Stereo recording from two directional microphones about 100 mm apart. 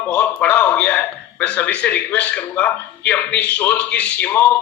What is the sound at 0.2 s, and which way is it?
A man's voice, 15° left (ahead or behind).